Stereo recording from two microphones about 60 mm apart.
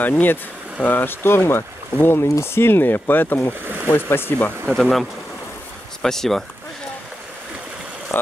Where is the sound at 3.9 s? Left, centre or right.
Left.